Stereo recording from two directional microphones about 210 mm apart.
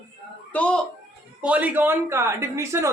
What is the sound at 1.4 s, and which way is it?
A woman's voice, 5° right (ahead or behind).